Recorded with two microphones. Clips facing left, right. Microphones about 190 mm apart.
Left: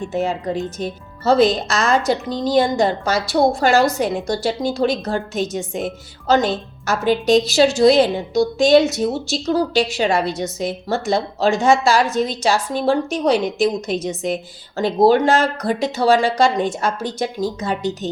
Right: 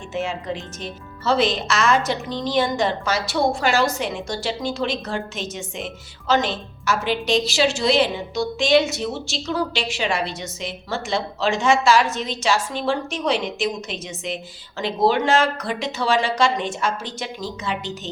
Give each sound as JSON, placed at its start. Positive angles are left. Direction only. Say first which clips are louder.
{"t": 0.1, "sound": "speech", "louder": "left 3 dB", "side_deg": 40}